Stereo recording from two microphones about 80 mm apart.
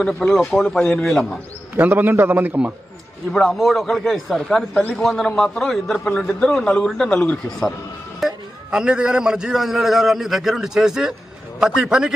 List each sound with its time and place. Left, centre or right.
0.0 s a man's voice: centre
1.0 s a man's voice: centre
1.8 s a man's voice: right
3.3 s a man's voice: centre
8.2 s a man's voice: centre